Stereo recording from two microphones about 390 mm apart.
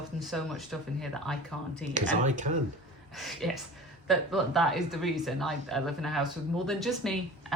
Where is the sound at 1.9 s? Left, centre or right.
Centre.